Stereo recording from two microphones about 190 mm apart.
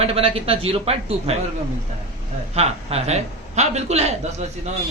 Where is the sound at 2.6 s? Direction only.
35° right (ahead or behind).